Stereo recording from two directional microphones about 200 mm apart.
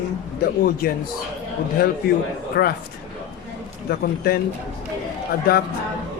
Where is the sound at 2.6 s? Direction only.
50° left (ahead or behind).